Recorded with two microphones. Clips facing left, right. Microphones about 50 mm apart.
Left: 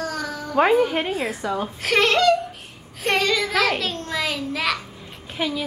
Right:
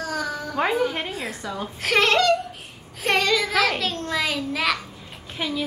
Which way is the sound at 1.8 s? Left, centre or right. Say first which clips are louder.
Even; centre.